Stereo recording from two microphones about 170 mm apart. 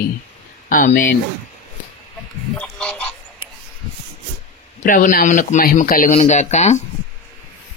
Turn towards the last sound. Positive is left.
turn(degrees=40)  # may be behind; listen again after turning